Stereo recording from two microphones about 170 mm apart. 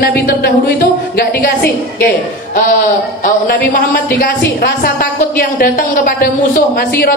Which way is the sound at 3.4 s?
55° left (ahead or behind).